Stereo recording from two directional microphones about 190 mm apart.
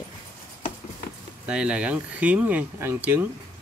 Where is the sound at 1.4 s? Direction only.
5° right (ahead or behind).